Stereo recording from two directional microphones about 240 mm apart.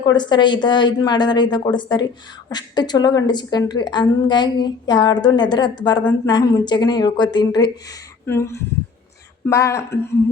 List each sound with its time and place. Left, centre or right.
0.0 s a woman's voice: centre